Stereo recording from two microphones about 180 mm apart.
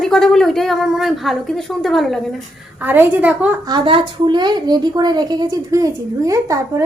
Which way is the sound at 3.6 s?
25° right (ahead or behind).